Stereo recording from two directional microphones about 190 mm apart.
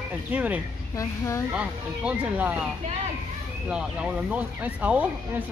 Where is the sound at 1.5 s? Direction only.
5° right (ahead or behind).